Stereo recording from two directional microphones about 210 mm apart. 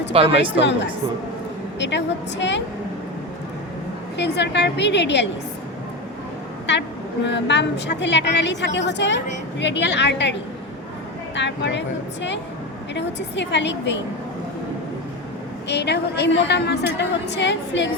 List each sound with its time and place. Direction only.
0.1 s a woman's voice: 25° right (ahead or behind)
0.6 s a woman's voice: 55° left (ahead or behind)
4.2 s a woman's voice: 55° left (ahead or behind)
6.7 s a woman's voice: 55° left (ahead or behind)
11.3 s a woman's voice: 55° left (ahead or behind)
12.9 s a woman's voice: 55° left (ahead or behind)
15.7 s a woman's voice: 55° left (ahead or behind)